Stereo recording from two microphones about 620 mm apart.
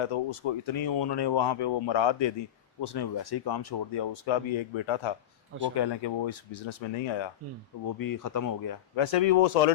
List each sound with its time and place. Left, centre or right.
0.0 s speech: left
7.9 s speech: left
9.0 s speech: left